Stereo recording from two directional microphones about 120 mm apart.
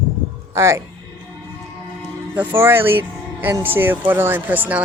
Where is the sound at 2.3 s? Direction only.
15° right (ahead or behind).